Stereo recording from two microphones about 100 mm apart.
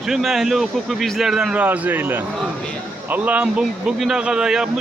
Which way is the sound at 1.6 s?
20° right (ahead or behind).